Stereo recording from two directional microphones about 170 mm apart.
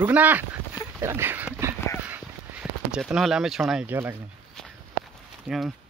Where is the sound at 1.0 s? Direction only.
15° right (ahead or behind).